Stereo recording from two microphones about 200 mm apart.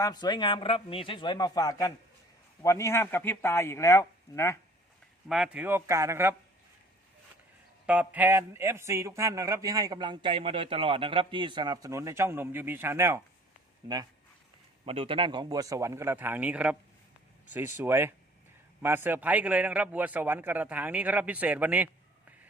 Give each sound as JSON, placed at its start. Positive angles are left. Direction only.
{"t": 0.0, "sound": "a man's voice", "side_deg": 20}
{"t": 5.3, "sound": "a man's voice", "side_deg": -5}
{"t": 7.9, "sound": "a man's voice", "side_deg": -5}